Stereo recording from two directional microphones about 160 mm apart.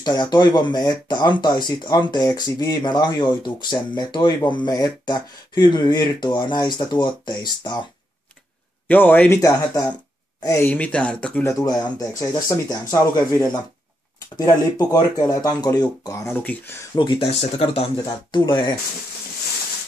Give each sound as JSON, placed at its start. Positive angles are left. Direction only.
{"t": 0.0, "sound": "speech", "side_deg": 25}
{"t": 8.8, "sound": "speech", "side_deg": 10}
{"t": 10.7, "sound": "speech", "side_deg": 10}
{"t": 11.4, "sound": "speech", "side_deg": 20}
{"t": 16.3, "sound": "speech", "side_deg": 15}
{"t": 17.0, "sound": "speech", "side_deg": 30}
{"t": 18.0, "sound": "speech", "side_deg": 25}